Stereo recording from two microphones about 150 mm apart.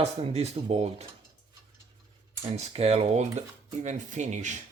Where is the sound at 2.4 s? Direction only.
40° right (ahead or behind).